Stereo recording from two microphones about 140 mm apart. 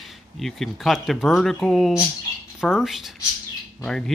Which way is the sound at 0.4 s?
Centre (ahead or behind).